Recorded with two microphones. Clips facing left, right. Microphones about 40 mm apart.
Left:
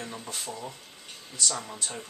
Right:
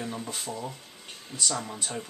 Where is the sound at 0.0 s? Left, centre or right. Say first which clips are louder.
Right 3 dB; centre.